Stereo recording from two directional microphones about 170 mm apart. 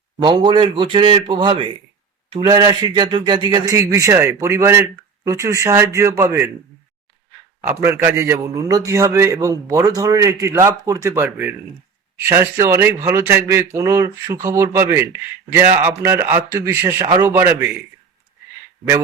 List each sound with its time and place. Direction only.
0.2 s speech: 25° right (ahead or behind)
7.7 s a man's voice: 15° right (ahead or behind)